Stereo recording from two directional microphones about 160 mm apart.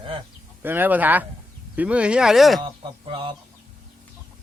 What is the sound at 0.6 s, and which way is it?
Speech, 10° right (ahead or behind).